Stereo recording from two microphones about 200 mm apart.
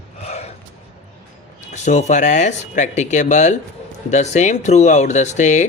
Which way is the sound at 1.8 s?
35° left (ahead or behind).